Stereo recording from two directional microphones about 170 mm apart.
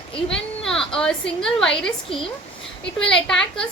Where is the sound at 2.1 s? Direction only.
30° left (ahead or behind).